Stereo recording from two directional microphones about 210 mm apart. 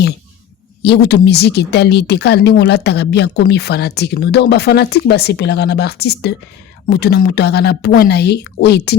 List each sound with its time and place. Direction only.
0.8 s speech: 50° left (ahead or behind)